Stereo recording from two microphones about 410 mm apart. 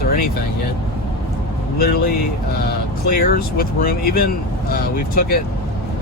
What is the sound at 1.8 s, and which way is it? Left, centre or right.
Speech, left.